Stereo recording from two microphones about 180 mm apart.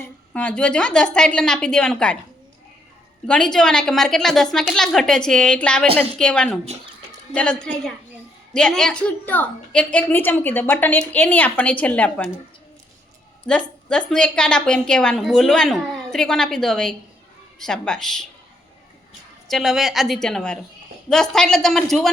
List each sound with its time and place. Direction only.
0.0 s a woman's voice: 5° left (ahead or behind)
3.2 s a woman's voice: 5° left (ahead or behind)
13.5 s a woman's voice: 5° left (ahead or behind)
19.5 s a woman's voice: centre (ahead or behind)